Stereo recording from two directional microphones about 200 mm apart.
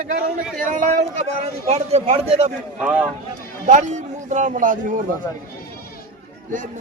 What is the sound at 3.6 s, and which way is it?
Speech, 35° right (ahead or behind).